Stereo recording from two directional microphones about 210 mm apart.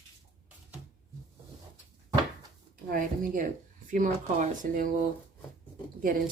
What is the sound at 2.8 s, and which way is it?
A woman's voice, 40° right (ahead or behind).